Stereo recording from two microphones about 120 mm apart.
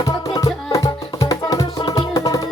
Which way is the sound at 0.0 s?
30° left (ahead or behind).